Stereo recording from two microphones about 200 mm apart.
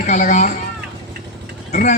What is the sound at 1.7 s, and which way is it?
Speech, 35° left (ahead or behind).